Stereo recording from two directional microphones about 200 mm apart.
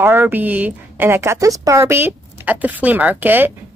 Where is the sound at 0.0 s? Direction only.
10° right (ahead or behind).